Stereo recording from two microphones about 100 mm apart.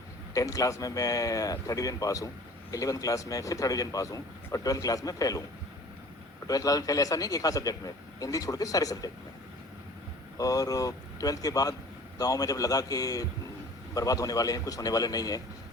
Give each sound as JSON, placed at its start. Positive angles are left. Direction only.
{"t": 0.3, "sound": "speech", "side_deg": 35}
{"t": 6.5, "sound": "speech", "side_deg": 35}
{"t": 10.3, "sound": "speech", "side_deg": 35}